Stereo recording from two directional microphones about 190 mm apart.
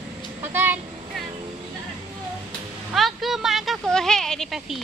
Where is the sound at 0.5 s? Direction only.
10° right (ahead or behind).